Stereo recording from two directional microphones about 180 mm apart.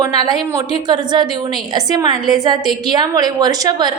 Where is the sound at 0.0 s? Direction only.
20° right (ahead or behind).